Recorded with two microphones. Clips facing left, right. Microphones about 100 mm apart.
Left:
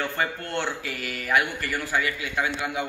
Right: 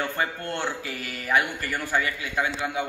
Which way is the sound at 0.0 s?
25° right (ahead or behind).